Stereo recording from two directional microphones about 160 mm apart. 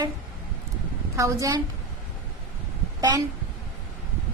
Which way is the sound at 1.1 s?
20° right (ahead or behind).